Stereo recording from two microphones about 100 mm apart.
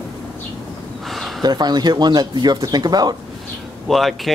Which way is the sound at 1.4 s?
45° right (ahead or behind).